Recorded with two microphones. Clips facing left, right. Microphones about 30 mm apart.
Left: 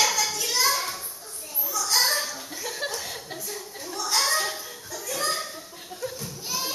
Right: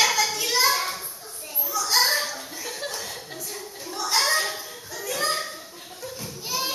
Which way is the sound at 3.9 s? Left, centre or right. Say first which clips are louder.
Right 2 dB; centre.